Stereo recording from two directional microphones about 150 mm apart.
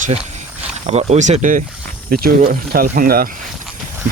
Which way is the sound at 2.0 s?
75° right (ahead or behind).